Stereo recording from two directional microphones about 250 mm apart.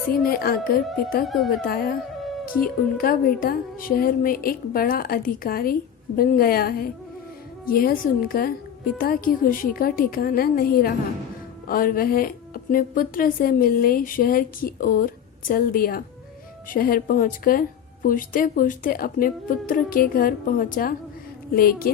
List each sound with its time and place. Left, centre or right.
0.1 s speech: left